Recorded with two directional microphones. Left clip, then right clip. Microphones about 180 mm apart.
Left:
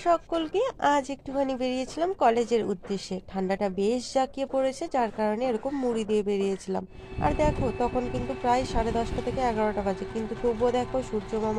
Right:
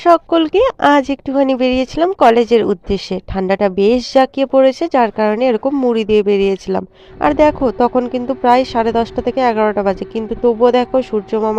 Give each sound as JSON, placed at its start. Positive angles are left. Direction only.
{"t": 0.0, "sound": "speech", "side_deg": -50}